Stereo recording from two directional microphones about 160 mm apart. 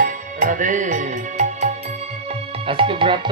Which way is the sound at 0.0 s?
55° right (ahead or behind).